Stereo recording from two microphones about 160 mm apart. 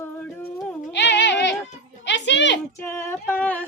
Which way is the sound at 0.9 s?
90° left.